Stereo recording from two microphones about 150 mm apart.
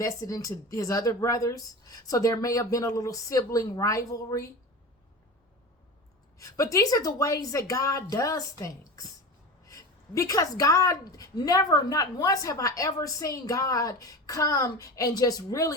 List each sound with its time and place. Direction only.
0.0 s a woman's voice: 25° left (ahead or behind)
6.4 s a woman's voice: 20° left (ahead or behind)